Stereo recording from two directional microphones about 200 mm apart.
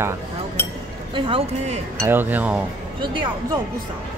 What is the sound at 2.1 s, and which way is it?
Speech, 10° right (ahead or behind).